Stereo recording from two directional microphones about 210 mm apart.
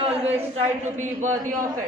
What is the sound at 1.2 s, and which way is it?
Speech, 35° right (ahead or behind).